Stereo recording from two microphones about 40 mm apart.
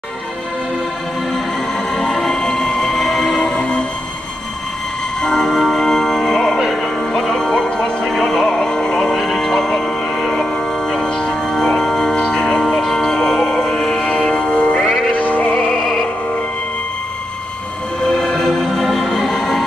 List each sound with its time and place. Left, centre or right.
2.0 s music: centre
3.0 s train: centre
5.2 s music: centre
18.0 s music: centre
18.5 s music: centre